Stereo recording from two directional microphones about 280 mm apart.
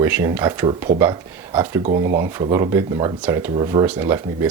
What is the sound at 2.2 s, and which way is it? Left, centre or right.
Speech, centre.